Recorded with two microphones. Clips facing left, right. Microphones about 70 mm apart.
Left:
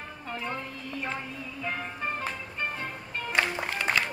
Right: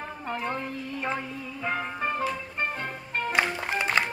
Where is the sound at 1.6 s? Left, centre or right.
Right.